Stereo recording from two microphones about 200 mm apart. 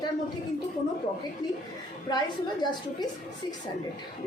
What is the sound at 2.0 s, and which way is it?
A woman's voice, 20° left (ahead or behind).